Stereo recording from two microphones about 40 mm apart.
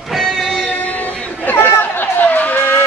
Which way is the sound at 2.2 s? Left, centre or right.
Left.